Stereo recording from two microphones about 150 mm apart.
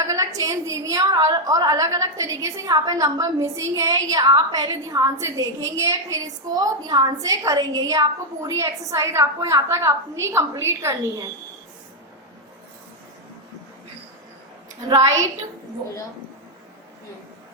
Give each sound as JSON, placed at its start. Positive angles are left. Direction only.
{"t": 0.0, "sound": "a woman's voice", "side_deg": -25}
{"t": 14.8, "sound": "a woman's voice", "side_deg": -25}